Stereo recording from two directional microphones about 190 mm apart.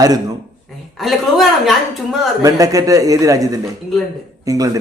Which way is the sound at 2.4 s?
20° right (ahead or behind).